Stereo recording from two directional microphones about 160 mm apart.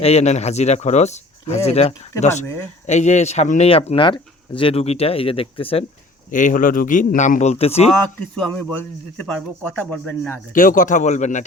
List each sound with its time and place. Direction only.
0.0 s speech: 45° left (ahead or behind)
2.4 s speech: 15° left (ahead or behind)
2.8 s speech: 45° left (ahead or behind)
6.3 s speech: 55° left (ahead or behind)
8.4 s speech: 5° left (ahead or behind)
10.5 s speech: 55° left (ahead or behind)